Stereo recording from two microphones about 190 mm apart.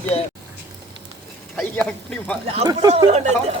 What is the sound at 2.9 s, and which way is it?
Speech, 35° right (ahead or behind).